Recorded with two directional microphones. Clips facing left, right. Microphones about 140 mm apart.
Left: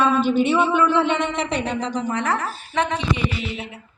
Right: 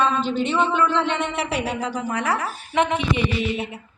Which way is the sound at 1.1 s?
5° right (ahead or behind).